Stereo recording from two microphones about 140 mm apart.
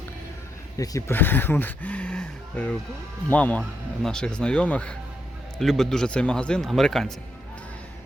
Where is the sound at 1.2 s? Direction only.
15° left (ahead or behind).